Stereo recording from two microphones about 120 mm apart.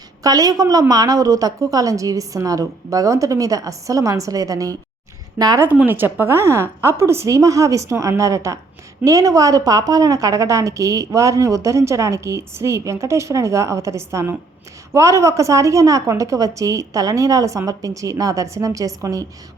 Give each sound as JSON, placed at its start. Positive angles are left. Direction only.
{"t": 0.2, "sound": "a woman's voice", "side_deg": -30}
{"t": 5.6, "sound": "a woman's voice", "side_deg": -15}